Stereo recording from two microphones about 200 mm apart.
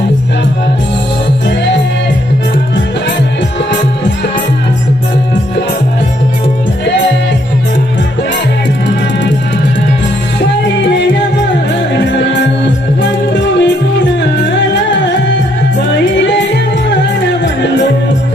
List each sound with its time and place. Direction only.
13.0 s music: 60° left (ahead or behind)